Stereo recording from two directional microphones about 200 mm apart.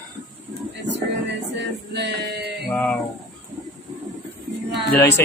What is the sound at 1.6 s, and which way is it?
Music, 60° right (ahead or behind).